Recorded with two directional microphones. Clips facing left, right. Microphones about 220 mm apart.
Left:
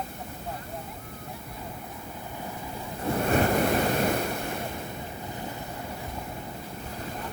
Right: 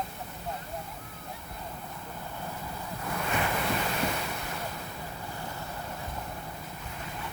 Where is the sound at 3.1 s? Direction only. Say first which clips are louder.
Left 8 dB; 45° left (ahead or behind).